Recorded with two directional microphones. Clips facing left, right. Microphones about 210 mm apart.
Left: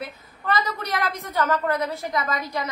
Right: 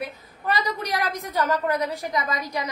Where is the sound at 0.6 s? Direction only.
15° right (ahead or behind).